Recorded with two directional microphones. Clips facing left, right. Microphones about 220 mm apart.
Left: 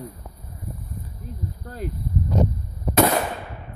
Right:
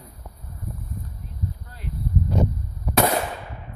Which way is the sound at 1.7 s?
45° left (ahead or behind).